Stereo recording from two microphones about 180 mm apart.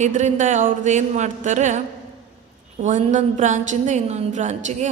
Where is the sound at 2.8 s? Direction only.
40° right (ahead or behind).